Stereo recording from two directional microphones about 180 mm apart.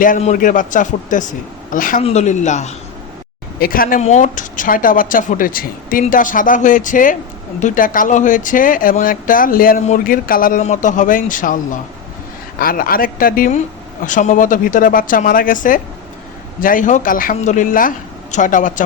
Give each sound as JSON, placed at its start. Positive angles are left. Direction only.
{"t": 0.2, "sound": "speech", "side_deg": 45}
{"t": 2.0, "sound": "speech", "side_deg": 35}
{"t": 3.6, "sound": "speech", "side_deg": 55}